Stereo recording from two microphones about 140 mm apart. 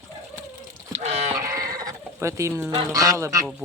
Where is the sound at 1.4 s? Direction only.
25° right (ahead or behind).